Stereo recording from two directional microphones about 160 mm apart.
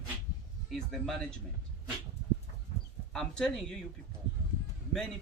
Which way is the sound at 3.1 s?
5° left (ahead or behind).